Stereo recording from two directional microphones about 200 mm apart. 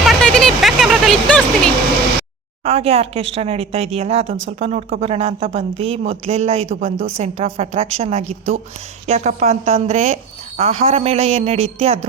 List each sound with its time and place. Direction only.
0.0 s vehicle: centre (ahead or behind)
2.6 s a woman's voice: 30° right (ahead or behind)